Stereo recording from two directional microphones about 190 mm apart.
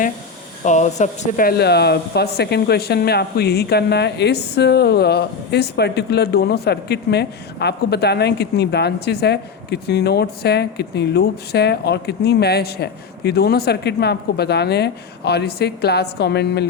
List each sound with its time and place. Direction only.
0.6 s speech: 40° left (ahead or behind); by 16.6 s 60° left (ahead or behind)